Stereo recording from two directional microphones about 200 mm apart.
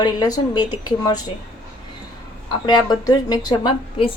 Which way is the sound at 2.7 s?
20° left (ahead or behind).